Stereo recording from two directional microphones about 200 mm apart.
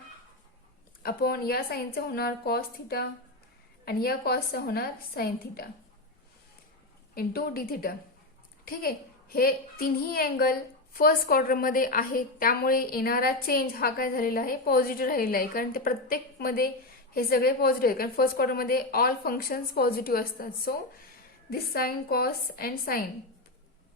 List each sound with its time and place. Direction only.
1.0 s a child's voice: 50° left (ahead or behind)
7.1 s a child's voice: 50° left (ahead or behind)